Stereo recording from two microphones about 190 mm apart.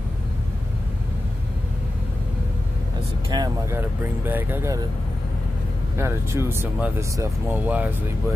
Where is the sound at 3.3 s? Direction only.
15° right (ahead or behind).